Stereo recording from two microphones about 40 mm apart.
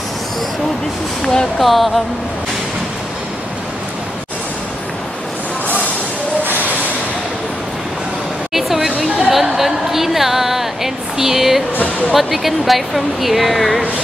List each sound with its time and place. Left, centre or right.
1.2 s speech: centre
1.6 s speech: centre
8.5 s a sound: centre
12.1 s speech: centre